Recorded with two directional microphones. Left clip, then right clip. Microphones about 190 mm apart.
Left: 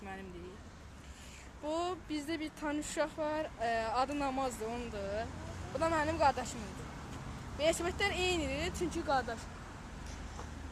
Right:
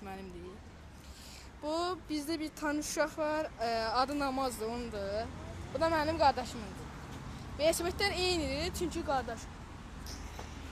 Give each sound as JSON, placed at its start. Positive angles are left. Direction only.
{"t": 1.6, "sound": "speech", "side_deg": -20}
{"t": 7.6, "sound": "speech", "side_deg": -20}
{"t": 8.9, "sound": "speech", "side_deg": 0}